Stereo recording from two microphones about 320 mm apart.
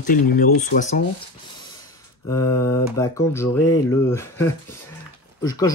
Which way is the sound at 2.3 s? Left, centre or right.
Centre.